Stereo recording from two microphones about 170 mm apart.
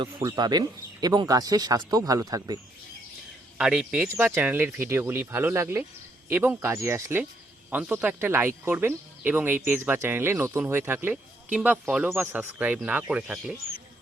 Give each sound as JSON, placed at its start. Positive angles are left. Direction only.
{"t": 0.2, "sound": "speech", "side_deg": -20}
{"t": 3.6, "sound": "speech", "side_deg": -5}